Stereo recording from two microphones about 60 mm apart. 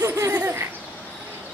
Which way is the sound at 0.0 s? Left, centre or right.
Right.